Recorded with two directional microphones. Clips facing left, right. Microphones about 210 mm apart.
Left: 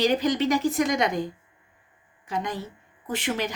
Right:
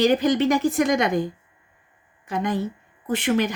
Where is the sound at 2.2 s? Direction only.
55° right (ahead or behind).